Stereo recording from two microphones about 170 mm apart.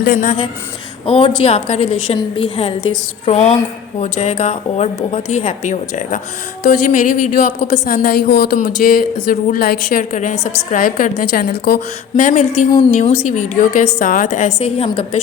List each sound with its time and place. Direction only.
0.0 s a woman's voice: 55° left (ahead or behind)
1.0 s a woman's voice: 35° left (ahead or behind); by 11.8 s 60° left (ahead or behind)
12.1 s a woman's voice: 45° left (ahead or behind)